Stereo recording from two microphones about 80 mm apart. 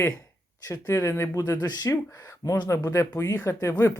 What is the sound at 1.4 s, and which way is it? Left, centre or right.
Speech, left.